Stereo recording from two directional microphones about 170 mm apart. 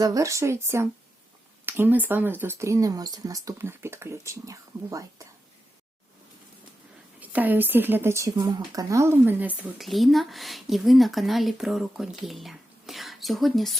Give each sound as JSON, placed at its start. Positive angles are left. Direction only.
{"t": 0.0, "sound": "speech", "side_deg": -20}
{"t": 7.2, "sound": "speech", "side_deg": -10}
{"t": 9.6, "sound": "speech", "side_deg": 0}